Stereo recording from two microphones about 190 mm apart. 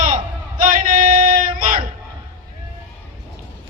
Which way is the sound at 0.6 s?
45° right (ahead or behind).